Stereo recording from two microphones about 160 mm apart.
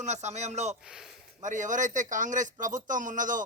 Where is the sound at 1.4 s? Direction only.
50° right (ahead or behind).